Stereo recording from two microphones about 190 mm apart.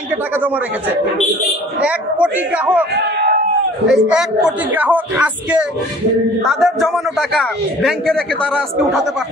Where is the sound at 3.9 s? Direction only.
5° right (ahead or behind).